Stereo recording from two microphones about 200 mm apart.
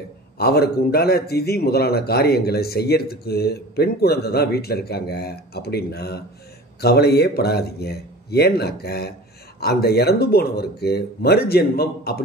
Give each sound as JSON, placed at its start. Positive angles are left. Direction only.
{"t": 0.4, "sound": "a man's voice", "side_deg": 50}